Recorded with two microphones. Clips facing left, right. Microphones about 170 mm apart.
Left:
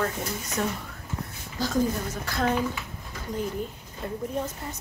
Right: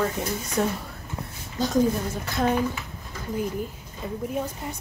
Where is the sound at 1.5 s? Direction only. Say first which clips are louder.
Right 4 dB; 20° right (ahead or behind).